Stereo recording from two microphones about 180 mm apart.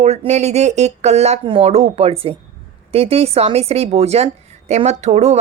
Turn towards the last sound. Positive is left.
turn(degrees=-40)  # may be behind; listen again after turning